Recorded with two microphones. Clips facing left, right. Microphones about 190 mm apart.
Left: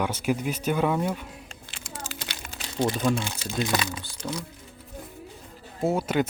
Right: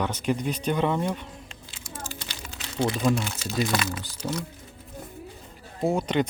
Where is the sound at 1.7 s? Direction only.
80° left.